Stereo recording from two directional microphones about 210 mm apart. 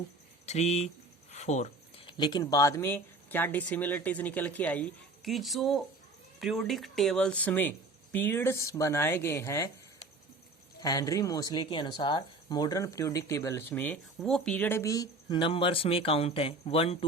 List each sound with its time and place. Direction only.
0.4 s speech: 30° left (ahead or behind); by 9.7 s 15° left (ahead or behind)
10.8 s speech: 15° left (ahead or behind)